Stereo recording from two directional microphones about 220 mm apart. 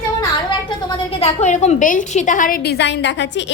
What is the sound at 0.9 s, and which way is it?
A woman's voice, 30° left (ahead or behind).